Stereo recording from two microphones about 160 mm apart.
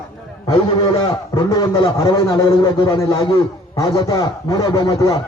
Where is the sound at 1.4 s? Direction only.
20° left (ahead or behind).